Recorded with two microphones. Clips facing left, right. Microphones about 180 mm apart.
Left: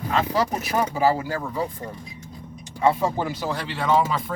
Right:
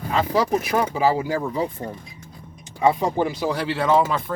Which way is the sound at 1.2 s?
15° right (ahead or behind).